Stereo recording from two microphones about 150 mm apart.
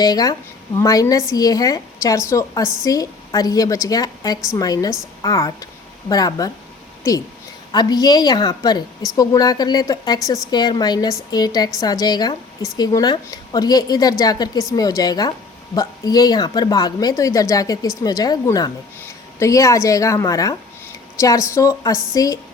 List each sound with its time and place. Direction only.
0.0 s a woman's voice: 25° left (ahead or behind)
7.7 s a woman's voice: 25° left (ahead or behind)